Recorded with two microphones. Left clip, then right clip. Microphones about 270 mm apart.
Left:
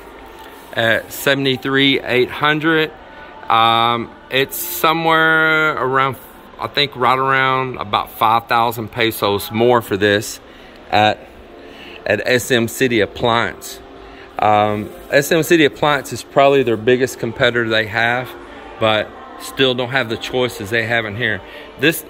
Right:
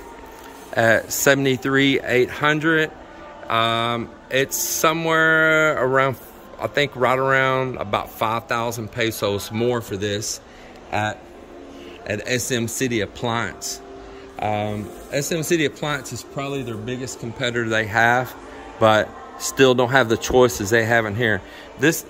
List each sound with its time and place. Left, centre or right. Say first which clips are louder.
0.7 s a man's voice: left 1 dB; centre
10.9 s speech: left 10 dB; left
12.0 s speech: left 9 dB; centre
16.1 s speech: left 16 dB; left
17.0 s speech: left 10 dB; centre